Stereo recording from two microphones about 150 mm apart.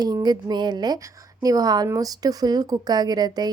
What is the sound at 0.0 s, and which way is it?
A woman's voice, 25° right (ahead or behind).